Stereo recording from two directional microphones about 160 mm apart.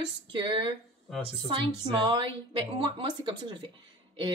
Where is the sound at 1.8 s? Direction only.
30° right (ahead or behind).